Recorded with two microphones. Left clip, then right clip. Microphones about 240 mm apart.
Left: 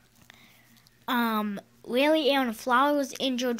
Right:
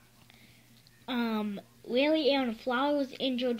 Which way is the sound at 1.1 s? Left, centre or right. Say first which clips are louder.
Left 6 dB; centre.